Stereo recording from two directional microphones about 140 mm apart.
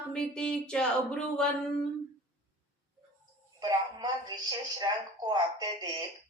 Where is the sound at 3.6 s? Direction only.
30° right (ahead or behind).